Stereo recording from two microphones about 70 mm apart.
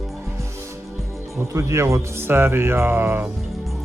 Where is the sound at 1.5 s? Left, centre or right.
Right.